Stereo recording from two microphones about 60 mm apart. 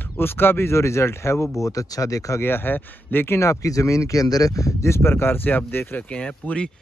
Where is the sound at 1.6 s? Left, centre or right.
Left.